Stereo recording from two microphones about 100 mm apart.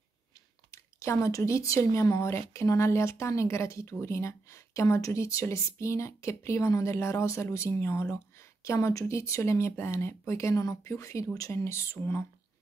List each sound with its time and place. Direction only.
0.7 s a woman's voice: 30° left (ahead or behind)